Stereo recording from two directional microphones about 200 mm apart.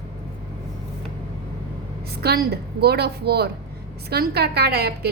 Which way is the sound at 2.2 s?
50° right (ahead or behind).